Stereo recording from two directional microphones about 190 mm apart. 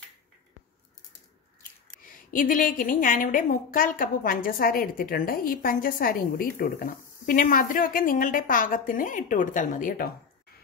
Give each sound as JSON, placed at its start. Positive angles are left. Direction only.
{"t": 2.0, "sound": "a woman's voice", "side_deg": 45}